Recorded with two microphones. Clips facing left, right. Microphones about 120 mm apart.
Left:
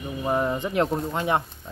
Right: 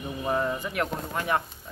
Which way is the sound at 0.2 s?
20° left (ahead or behind).